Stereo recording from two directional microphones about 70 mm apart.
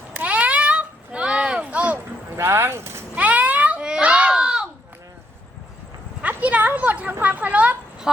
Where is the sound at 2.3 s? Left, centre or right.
Right.